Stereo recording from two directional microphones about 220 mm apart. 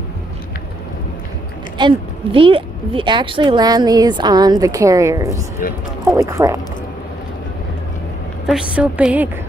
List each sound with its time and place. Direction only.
1.8 s a woman's voice: 25° right (ahead or behind)
5.6 s speech: 40° left (ahead or behind)
6.0 s a woman's voice: 15° right (ahead or behind)
8.5 s a woman's voice: 5° right (ahead or behind)